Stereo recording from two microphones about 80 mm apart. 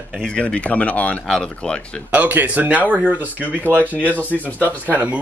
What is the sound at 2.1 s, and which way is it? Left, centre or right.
Speech, right.